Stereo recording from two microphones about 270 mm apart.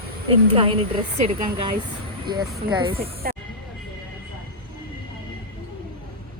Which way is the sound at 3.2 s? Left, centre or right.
Right.